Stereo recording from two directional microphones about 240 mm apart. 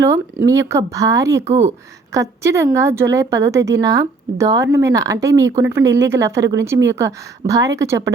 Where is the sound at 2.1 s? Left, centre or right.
Centre.